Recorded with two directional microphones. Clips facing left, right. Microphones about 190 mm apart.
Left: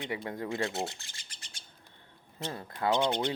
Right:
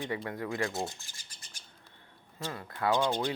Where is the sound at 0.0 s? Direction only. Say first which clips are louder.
Even; 20° left (ahead or behind).